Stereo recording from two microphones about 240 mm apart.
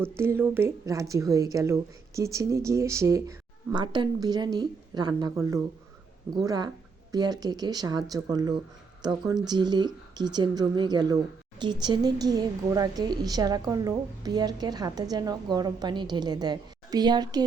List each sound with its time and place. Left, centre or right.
0.0 s a woman's voice: centre